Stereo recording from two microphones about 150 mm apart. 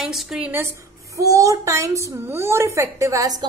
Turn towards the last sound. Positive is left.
turn(degrees=-25)  # may be behind; listen again after turning